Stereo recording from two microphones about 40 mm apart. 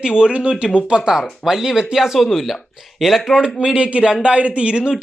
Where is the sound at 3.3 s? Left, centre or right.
Centre.